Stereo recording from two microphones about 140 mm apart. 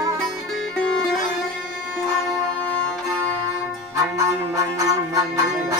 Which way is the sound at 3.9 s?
25° right (ahead or behind).